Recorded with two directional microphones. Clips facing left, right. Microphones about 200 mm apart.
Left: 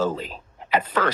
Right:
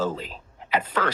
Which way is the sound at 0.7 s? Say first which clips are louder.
Left 3 dB; 40° left (ahead or behind).